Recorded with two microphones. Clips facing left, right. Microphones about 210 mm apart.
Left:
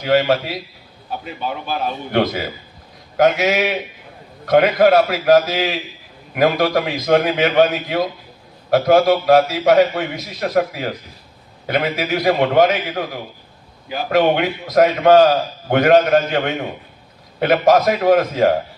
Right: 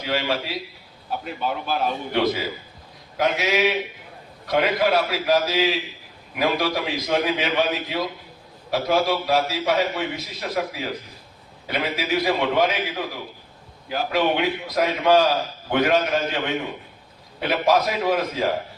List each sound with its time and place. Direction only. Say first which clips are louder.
0.0 s a man's voice: left 9 dB; 50° left (ahead or behind)
1.2 s a man's voice: left 1 dB; centre (ahead or behind)
2.1 s a man's voice: left 5 dB; 50° left (ahead or behind)
14.1 s a man's voice: left 6 dB; 50° left (ahead or behind)